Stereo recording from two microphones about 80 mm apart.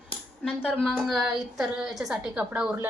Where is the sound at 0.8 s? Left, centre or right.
Centre.